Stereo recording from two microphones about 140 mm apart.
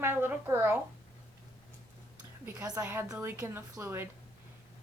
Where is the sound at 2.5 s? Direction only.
25° right (ahead or behind).